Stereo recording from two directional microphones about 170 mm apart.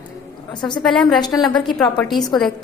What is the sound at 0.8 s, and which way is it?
Speech, 5° left (ahead or behind).